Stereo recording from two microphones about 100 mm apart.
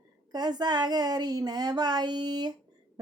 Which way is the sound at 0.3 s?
45° right (ahead or behind).